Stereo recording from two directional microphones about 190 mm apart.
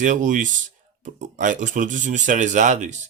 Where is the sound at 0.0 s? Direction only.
40° right (ahead or behind).